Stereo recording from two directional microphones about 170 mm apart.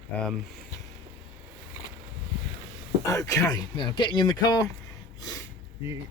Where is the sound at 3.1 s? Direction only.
20° left (ahead or behind).